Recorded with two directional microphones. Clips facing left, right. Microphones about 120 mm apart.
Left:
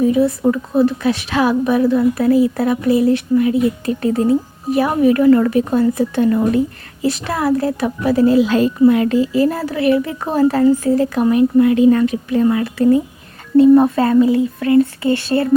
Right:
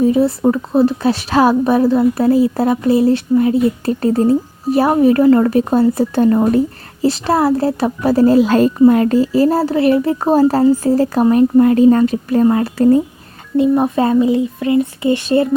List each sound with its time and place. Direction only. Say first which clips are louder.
0.0 s a woman's voice: right 1 dB; 30° right (ahead or behind)
13.6 s speech: left 4 dB; 15° right (ahead or behind)